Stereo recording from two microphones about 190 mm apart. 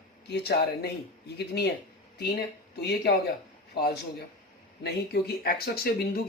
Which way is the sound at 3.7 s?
55° left (ahead or behind).